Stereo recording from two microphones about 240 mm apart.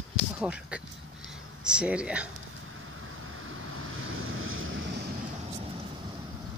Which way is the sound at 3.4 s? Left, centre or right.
Right.